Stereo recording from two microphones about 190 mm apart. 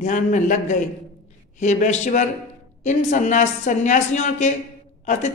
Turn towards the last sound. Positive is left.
turn(degrees=40)  # may be behind; listen again after turning